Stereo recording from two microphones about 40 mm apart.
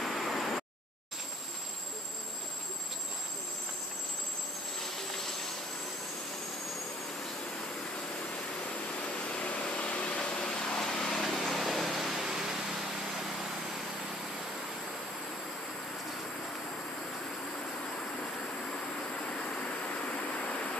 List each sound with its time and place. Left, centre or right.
0.0 s a sound: centre
4.7 s vehicle: centre
9.0 s vehicle: left
10.3 s a sound: centre
19.2 s train: left
20.3 s vehicle: left